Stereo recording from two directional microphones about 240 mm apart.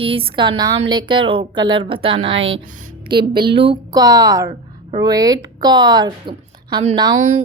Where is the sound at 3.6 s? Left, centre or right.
Centre.